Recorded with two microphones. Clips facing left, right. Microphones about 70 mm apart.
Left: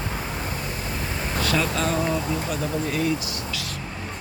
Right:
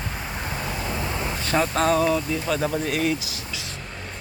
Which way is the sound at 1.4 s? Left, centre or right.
Right.